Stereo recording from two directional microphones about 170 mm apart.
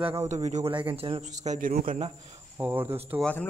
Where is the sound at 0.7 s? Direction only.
30° right (ahead or behind); by 1.8 s 55° right (ahead or behind).